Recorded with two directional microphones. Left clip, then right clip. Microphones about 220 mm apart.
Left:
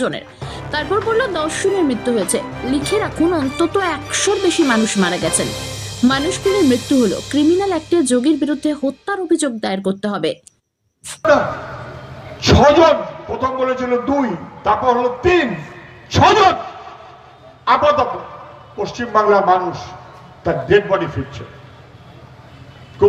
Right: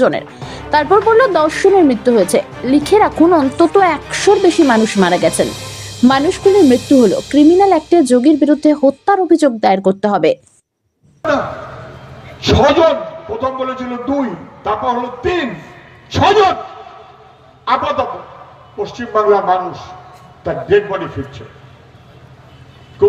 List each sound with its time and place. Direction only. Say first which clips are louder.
0.0 s speech: right 8 dB; 10° right (ahead or behind)
5.3 s music: right 4 dB; centre (ahead or behind)
6.1 s speech: right 5 dB; 15° right (ahead or behind)
6.4 s speech: right 7 dB; centre (ahead or behind)
12.4 s a man's voice: even; 20° left (ahead or behind)
17.7 s a man's voice: left 2 dB; 20° left (ahead or behind)
23.0 s speech: right 1 dB; 20° left (ahead or behind)